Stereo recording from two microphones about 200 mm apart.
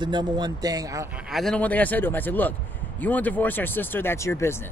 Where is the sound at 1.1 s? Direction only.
Centre (ahead or behind).